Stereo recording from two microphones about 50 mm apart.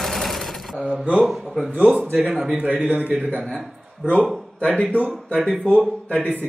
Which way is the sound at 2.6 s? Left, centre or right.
Right.